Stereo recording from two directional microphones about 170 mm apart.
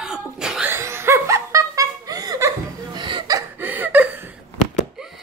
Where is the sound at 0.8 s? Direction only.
15° right (ahead or behind).